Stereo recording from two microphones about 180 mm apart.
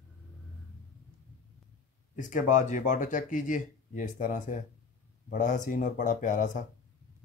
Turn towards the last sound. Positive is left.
turn(degrees=45)  # may be behind; listen again after turning